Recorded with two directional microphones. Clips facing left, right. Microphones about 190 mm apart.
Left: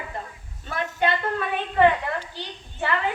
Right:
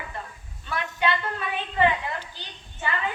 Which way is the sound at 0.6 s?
40° left (ahead or behind).